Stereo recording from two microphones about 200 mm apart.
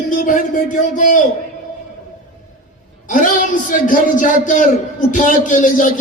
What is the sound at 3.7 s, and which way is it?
A man's voice, 40° left (ahead or behind).